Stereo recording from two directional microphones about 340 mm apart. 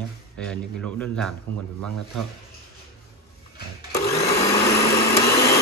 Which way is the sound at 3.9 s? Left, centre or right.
Centre.